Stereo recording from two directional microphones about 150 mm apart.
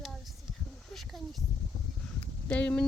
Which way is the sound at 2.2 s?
10° left (ahead or behind).